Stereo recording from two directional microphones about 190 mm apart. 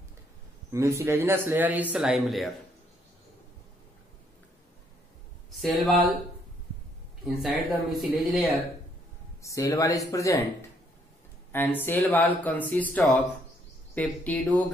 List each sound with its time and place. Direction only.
0.7 s a man's voice: 15° right (ahead or behind)
5.6 s speech: centre (ahead or behind)
7.2 s speech: centre (ahead or behind)
9.4 s speech: 15° left (ahead or behind)
11.5 s speech: 10° left (ahead or behind)